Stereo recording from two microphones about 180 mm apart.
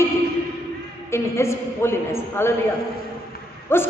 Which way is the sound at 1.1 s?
15° left (ahead or behind).